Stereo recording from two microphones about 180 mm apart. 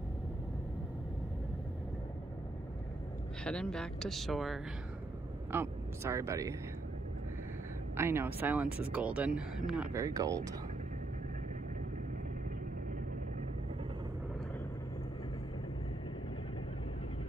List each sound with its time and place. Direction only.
3.4 s speech: 5° left (ahead or behind)
5.5 s speech: 15° right (ahead or behind)
7.9 s speech: 15° right (ahead or behind)
10.0 s speech: 20° right (ahead or behind)